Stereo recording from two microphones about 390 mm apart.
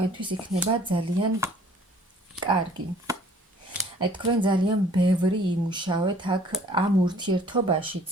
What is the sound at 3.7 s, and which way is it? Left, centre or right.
Speech, centre.